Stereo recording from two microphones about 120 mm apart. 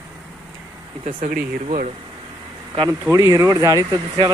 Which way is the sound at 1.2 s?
70° right (ahead or behind).